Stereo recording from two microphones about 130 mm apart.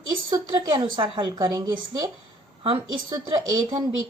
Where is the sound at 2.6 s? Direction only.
45° right (ahead or behind).